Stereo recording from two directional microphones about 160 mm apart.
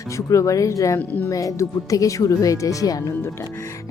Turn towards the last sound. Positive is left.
turn(degrees=20)  # may be behind; listen again after turning